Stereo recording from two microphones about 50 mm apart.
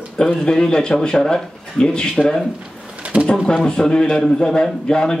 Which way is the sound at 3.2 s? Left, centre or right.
Centre.